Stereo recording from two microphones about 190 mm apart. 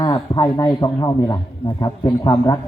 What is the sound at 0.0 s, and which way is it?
A man's voice, 20° left (ahead or behind).